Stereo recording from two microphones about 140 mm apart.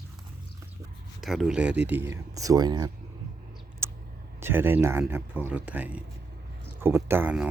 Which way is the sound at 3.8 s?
20° right (ahead or behind).